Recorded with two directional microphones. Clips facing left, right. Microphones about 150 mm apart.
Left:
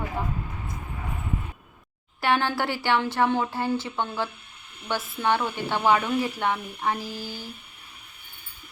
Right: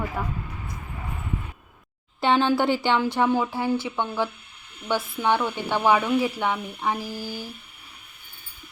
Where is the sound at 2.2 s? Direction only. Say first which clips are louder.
Right 4 dB; 20° right (ahead or behind).